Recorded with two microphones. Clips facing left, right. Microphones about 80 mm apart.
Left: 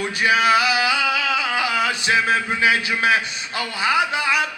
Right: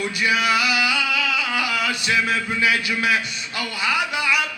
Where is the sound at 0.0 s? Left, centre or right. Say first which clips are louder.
Left 3 dB; left.